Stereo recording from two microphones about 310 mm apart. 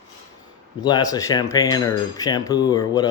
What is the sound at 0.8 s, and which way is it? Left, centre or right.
Speech, centre.